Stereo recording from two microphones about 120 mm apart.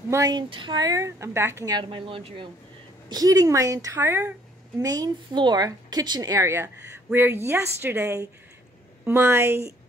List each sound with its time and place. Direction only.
0.1 s speech: 30° right (ahead or behind)
1.8 s speech: 45° right (ahead or behind)
3.1 s a woman's voice: 30° right (ahead or behind)